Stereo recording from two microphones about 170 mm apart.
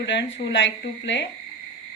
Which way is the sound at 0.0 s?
90° left.